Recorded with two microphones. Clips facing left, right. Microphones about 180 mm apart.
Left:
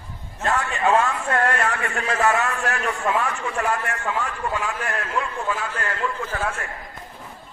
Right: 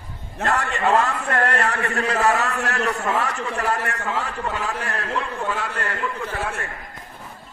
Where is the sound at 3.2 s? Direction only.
35° right (ahead or behind).